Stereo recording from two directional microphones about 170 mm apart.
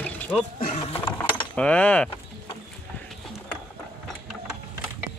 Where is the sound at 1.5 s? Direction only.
5° left (ahead or behind).